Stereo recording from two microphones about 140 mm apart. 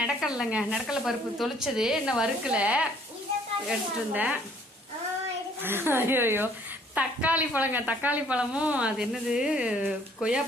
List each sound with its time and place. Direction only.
0.2 s speech: 5° right (ahead or behind)
5.6 s speech: 15° right (ahead or behind)